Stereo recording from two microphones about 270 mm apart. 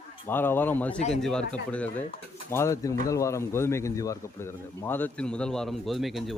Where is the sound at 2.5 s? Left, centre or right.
Centre.